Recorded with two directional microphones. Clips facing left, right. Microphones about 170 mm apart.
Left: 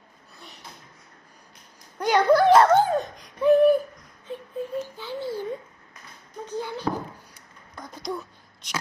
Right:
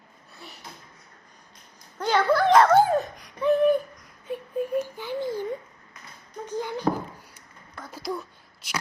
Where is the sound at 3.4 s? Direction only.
5° left (ahead or behind).